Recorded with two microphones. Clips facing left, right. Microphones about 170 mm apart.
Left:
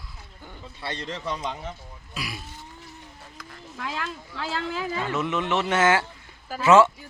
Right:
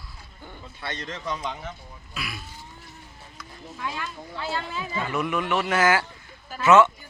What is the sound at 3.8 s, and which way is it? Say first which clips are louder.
Speech: left 1 dB; 90° left.